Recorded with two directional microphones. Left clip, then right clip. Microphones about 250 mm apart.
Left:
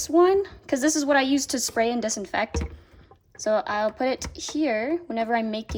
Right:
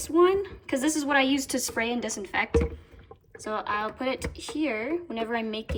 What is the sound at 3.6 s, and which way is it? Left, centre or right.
Speech, centre.